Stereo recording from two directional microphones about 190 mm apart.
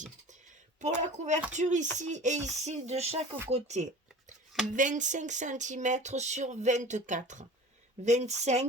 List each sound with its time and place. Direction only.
0.0 s speech: 40° right (ahead or behind)